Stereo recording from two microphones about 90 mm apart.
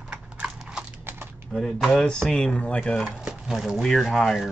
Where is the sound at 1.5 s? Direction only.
5° left (ahead or behind).